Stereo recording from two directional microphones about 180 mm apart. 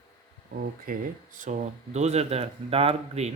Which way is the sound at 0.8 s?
45° right (ahead or behind).